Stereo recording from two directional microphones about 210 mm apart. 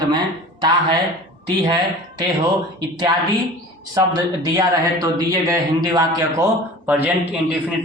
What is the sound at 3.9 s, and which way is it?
Speech, 15° right (ahead or behind).